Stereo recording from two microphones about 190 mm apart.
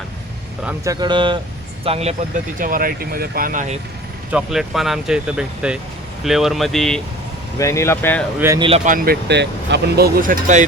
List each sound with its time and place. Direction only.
0.9 s speech: 20° right (ahead or behind)
2.6 s speech: 45° right (ahead or behind)
4.3 s speech: 5° right (ahead or behind)
7.6 s speech: 15° left (ahead or behind)
8.4 s speech: 15° right (ahead or behind)
8.6 s speech: 35° right (ahead or behind)
9.2 s speech: 65° right (ahead or behind); by 10.7 s 45° right (ahead or behind)